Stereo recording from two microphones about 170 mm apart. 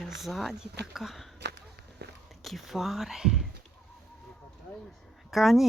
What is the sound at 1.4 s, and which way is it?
Walk, 80° right.